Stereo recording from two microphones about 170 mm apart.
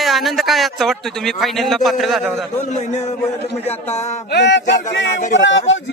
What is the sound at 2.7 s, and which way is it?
A man's voice, 45° left (ahead or behind).